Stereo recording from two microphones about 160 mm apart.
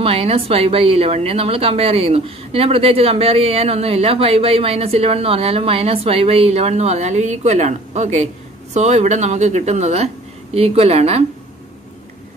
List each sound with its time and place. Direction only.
0.0 s a woman's voice: 40° right (ahead or behind)